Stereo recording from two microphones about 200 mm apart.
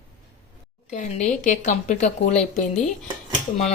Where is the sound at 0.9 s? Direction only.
35° left (ahead or behind).